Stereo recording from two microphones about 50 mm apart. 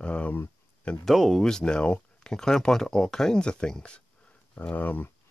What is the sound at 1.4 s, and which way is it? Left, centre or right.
Speech, centre.